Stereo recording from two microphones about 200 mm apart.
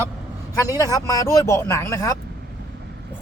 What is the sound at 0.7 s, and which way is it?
Speech, 15° left (ahead or behind).